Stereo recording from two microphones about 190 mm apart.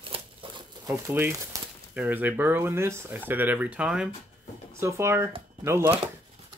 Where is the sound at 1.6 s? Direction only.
15° right (ahead or behind).